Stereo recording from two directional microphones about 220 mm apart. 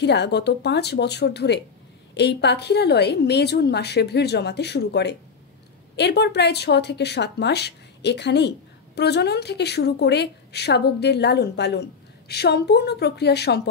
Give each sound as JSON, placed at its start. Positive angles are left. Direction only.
{"t": 0.0, "sound": "speech", "side_deg": 50}